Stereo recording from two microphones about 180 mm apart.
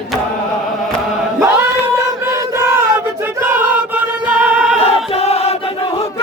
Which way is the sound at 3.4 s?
10° right (ahead or behind).